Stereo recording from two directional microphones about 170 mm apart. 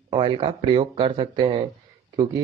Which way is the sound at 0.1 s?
30° right (ahead or behind).